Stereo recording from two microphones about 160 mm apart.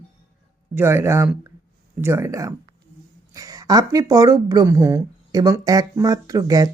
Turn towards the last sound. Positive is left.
turn(degrees=-20)  # may be behind; listen again after turning